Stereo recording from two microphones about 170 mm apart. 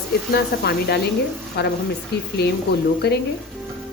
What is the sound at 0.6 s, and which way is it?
A woman's voice, 75° left (ahead or behind).